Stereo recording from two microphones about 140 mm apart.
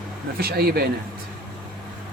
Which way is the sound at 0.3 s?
90° right.